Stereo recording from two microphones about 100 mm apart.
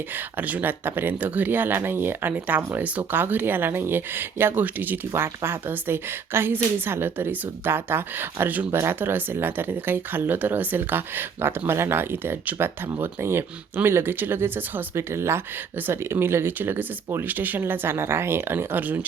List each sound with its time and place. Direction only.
0.1 s speech: 20° right (ahead or behind)
2.8 s speech: 15° right (ahead or behind)